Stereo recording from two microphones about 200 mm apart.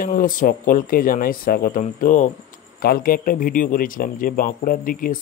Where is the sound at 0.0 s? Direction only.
45° left (ahead or behind).